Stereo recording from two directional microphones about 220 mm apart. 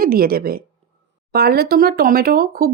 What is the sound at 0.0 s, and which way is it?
Speech, 45° right (ahead or behind).